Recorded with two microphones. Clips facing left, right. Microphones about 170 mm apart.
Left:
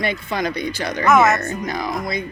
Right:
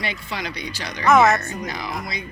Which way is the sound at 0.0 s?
50° left (ahead or behind).